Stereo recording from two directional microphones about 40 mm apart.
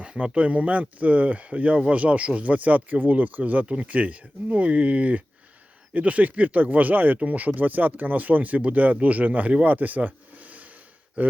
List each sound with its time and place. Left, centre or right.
0.0 s speech: right